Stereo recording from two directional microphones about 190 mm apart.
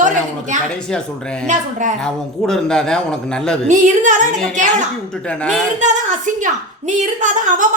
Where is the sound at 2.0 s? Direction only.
5° left (ahead or behind).